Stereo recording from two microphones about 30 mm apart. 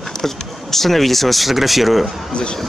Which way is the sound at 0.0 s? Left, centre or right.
Centre.